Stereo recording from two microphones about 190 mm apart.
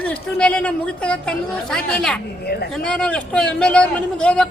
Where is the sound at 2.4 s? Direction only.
55° left (ahead or behind).